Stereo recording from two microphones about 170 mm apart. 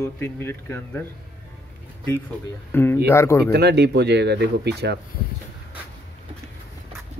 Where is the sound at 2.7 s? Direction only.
15° left (ahead or behind).